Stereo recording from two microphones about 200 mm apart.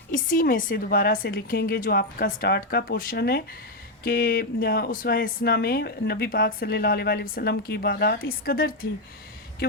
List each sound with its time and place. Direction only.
0.1 s speech: 40° left (ahead or behind)